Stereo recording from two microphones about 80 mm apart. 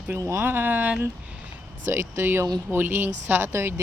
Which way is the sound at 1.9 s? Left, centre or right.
Right.